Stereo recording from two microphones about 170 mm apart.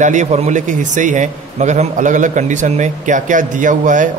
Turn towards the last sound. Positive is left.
turn(degrees=-50)  # may be behind; listen again after turning